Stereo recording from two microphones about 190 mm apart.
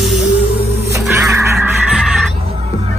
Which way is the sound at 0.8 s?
15° right (ahead or behind).